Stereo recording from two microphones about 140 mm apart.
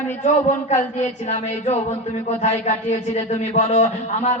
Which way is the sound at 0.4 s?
55° left (ahead or behind).